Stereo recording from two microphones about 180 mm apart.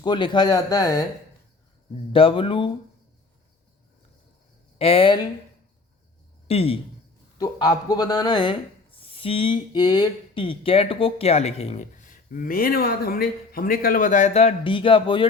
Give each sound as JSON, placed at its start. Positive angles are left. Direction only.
{"t": 0.0, "sound": "speech", "side_deg": 25}
{"t": 4.8, "sound": "speech", "side_deg": 30}
{"t": 6.5, "sound": "speech", "side_deg": 35}
{"t": 7.3, "sound": "speech", "side_deg": 20}